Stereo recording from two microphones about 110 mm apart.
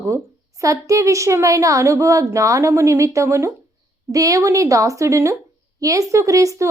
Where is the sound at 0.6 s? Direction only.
30° right (ahead or behind).